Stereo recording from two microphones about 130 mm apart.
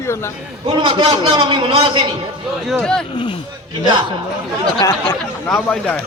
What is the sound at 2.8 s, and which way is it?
Speech, 5° left (ahead or behind).